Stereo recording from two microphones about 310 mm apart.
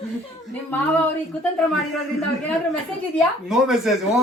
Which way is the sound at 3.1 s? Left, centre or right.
Centre.